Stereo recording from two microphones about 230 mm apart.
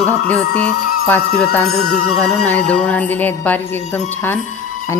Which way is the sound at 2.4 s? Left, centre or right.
Centre.